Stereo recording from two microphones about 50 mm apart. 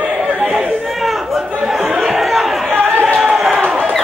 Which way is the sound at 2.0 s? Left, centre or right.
Centre.